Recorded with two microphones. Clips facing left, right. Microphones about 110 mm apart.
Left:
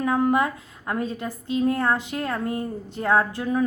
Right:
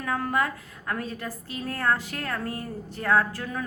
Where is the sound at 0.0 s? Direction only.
20° left (ahead or behind).